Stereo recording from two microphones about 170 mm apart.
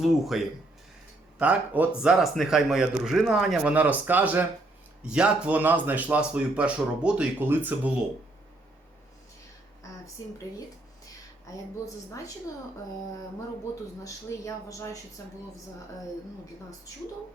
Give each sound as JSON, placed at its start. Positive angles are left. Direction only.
{"t": 0.0, "sound": "speech", "side_deg": 0}
{"t": 14.0, "sound": "speech", "side_deg": 20}